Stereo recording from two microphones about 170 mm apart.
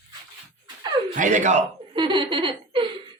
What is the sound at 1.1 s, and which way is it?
Speech, 45° right (ahead or behind).